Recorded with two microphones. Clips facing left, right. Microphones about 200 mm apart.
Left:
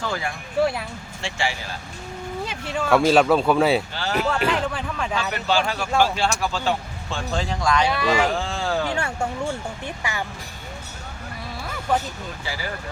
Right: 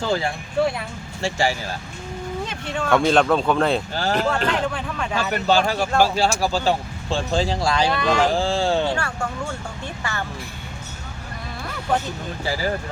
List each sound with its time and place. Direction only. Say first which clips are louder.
0.0 s speech: right 5 dB; 30° right (ahead or behind)
1.2 s speech: right 5 dB; 40° right (ahead or behind)
2.4 s speech: left 2 dB; 5° left (ahead or behind)
3.9 s a sound: right 3 dB; 45° right (ahead or behind)
4.2 s speech: left 2 dB; 5° left (ahead or behind)
5.3 s speech: right 6 dB; 40° right (ahead or behind)
7.9 s speech: right 1 dB; 5° left (ahead or behind)
8.3 s speech: right 5 dB; 30° right (ahead or behind)
9.8 s speech: right 2 dB; 15° left (ahead or behind)
12.5 s speech: right 8 dB; 40° right (ahead or behind)